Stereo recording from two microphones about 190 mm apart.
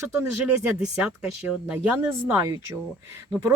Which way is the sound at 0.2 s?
5° right (ahead or behind).